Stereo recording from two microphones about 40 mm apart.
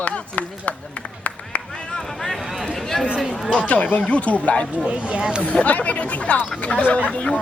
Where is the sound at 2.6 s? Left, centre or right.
Centre.